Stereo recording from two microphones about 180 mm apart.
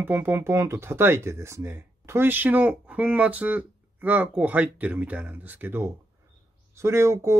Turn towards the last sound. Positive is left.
turn(degrees=-15)  # may be behind; listen again after turning